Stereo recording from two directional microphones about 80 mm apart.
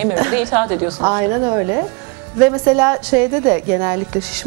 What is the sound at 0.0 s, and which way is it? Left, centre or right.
A woman's voice, centre.